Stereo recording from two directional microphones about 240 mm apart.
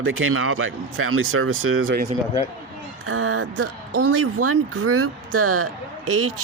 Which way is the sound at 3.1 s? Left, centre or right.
Right.